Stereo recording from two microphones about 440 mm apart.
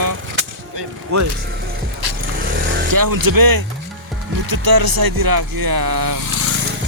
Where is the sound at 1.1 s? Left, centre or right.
Right.